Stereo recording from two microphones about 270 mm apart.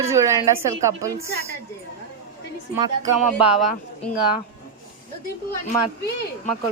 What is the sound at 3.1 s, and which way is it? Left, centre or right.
Speech, right.